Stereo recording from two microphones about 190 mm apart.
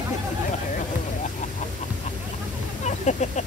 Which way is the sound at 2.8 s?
40° left (ahead or behind).